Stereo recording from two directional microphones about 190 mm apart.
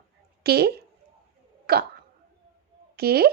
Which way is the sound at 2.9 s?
55° right (ahead or behind).